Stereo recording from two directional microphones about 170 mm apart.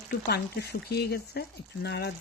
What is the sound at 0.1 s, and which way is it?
Speech, 70° left (ahead or behind).